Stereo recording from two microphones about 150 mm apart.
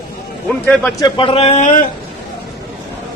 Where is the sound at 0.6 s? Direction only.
5° left (ahead or behind).